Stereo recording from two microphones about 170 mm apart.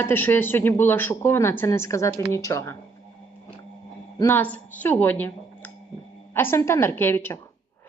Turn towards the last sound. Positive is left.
turn(degrees=15)  # may be behind; listen again after turning